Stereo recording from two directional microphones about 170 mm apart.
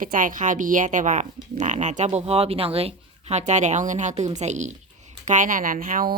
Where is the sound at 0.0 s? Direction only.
50° right (ahead or behind).